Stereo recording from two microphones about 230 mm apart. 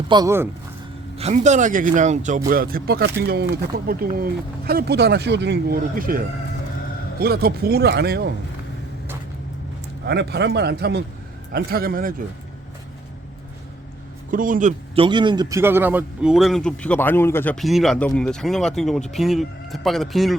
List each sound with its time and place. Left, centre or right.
0.1 s speech: centre
1.1 s speech: right
10.1 s speech: right
14.3 s a man's voice: right; by 20.3 s centre